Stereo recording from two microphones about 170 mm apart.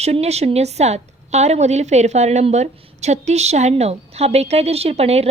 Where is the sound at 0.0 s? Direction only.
40° right (ahead or behind).